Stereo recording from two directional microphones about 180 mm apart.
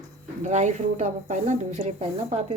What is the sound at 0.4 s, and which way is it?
Speech, 40° right (ahead or behind).